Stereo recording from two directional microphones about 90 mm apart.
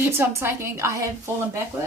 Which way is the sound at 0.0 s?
25° right (ahead or behind).